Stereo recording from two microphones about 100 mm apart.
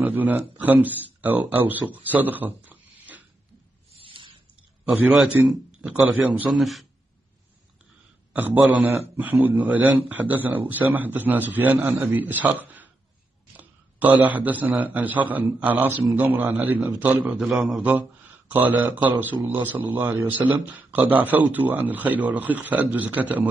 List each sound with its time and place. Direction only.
0.0 s speech: 15° right (ahead or behind)
4.0 s a sound: 60° right (ahead or behind)
4.8 s a man's voice: centre (ahead or behind)
6.5 s a man's voice: centre (ahead or behind)
8.3 s a man's voice: 15° right (ahead or behind)
17.5 s a man's voice: centre (ahead or behind)
18.5 s a man's voice: 20° right (ahead or behind)